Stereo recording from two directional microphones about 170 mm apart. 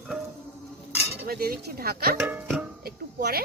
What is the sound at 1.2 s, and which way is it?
Speech, 65° right (ahead or behind).